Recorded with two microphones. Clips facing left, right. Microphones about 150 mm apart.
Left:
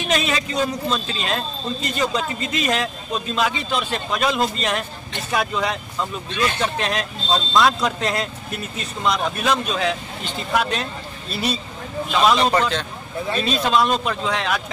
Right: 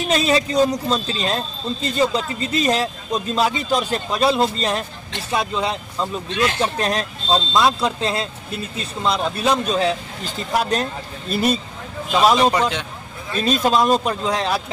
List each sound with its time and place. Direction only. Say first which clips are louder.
0.0 s speech: right 4 dB; 35° right (ahead or behind)
7.5 s speech: left 2 dB; 25° right (ahead or behind); by 11.5 s 45° right (ahead or behind)
12.4 s speech: right 1 dB; 10° right (ahead or behind)
13.4 s speech: right 3 dB; 40° right (ahead or behind)